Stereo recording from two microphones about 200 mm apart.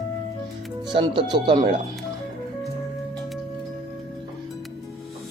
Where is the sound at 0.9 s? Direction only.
25° right (ahead or behind).